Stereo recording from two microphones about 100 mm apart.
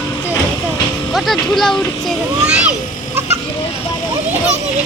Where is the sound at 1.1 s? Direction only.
Centre (ahead or behind).